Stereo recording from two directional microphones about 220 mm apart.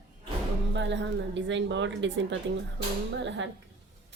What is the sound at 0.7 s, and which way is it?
A woman's voice, 55° right (ahead or behind).